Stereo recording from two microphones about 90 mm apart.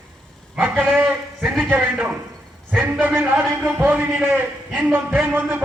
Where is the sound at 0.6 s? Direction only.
20° right (ahead or behind).